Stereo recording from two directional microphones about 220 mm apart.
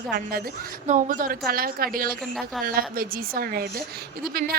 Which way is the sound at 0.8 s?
35° right (ahead or behind).